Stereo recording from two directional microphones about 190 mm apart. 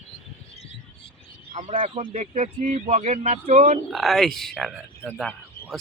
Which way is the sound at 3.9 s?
Centre (ahead or behind).